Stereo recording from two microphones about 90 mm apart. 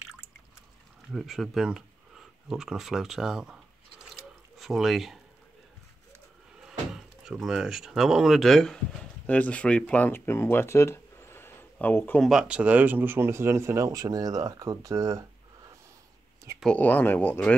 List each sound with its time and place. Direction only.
1.1 s speech: centre (ahead or behind)
4.2 s drip: 5° right (ahead or behind)
6.6 s speech: 5° right (ahead or behind)
9.2 s speech: 15° left (ahead or behind)
12.2 s speech: 5° right (ahead or behind); by 13.8 s 30° right (ahead or behind)
13.8 s speech: 45° right (ahead or behind)
16.6 s speech: 15° left (ahead or behind)